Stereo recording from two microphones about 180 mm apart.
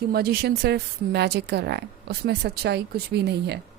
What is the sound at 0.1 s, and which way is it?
A woman's voice, 60° right (ahead or behind).